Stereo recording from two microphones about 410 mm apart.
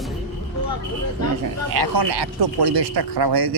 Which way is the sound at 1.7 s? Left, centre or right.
Right.